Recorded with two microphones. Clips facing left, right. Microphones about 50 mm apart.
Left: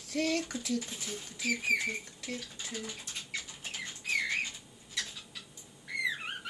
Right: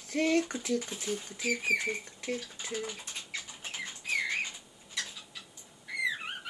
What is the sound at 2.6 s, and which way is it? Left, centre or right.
Typing, right.